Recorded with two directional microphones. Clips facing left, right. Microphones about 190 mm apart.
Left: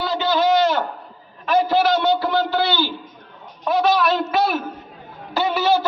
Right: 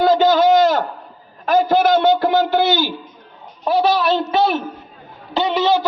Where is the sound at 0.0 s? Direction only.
45° right (ahead or behind).